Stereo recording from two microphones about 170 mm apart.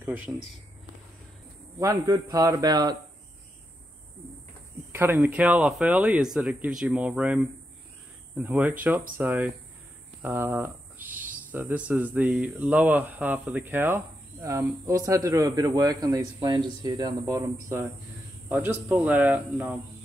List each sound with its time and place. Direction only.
0.0 s speech: 10° right (ahead or behind)
1.8 s speech: 20° right (ahead or behind)
4.9 s speech: 10° right (ahead or behind)